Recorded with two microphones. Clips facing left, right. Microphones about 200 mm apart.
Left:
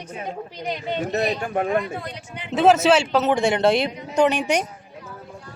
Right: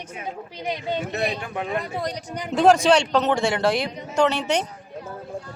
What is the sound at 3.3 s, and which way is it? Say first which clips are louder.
Speech: left 3 dB; 20° left (ahead or behind).